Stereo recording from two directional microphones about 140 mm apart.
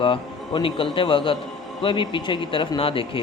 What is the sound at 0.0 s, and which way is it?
A man's voice, 40° left (ahead or behind).